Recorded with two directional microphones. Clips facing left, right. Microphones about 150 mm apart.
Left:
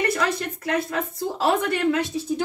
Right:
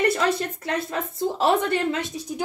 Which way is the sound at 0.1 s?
25° right (ahead or behind).